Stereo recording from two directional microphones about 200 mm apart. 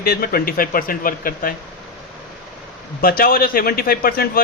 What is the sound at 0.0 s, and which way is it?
Speech, 45° left (ahead or behind).